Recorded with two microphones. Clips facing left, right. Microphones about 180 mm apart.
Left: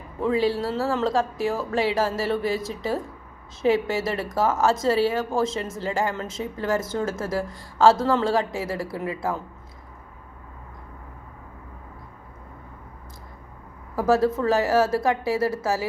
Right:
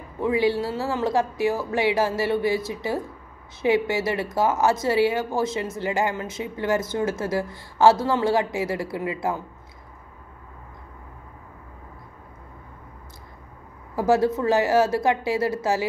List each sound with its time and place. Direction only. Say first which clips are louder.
0.2 s speech: right 1 dB; 15° right (ahead or behind)
13.9 s a woman's voice: even; 20° right (ahead or behind)